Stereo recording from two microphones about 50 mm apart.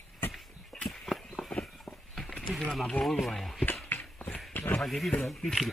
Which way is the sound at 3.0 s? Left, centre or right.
Centre.